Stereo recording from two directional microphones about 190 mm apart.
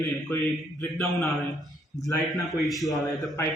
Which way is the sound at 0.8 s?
15° left (ahead or behind).